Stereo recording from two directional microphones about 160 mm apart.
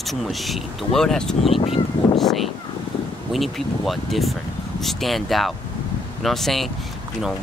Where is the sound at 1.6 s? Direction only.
35° left (ahead or behind).